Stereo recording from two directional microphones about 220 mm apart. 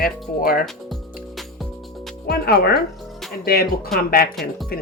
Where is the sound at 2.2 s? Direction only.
45° left (ahead or behind).